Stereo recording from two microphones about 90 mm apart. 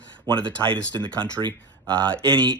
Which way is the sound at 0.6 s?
65° right (ahead or behind).